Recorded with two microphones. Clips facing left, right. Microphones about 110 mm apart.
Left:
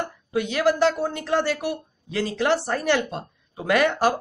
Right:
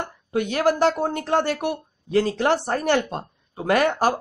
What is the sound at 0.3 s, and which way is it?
Speech, 45° right (ahead or behind).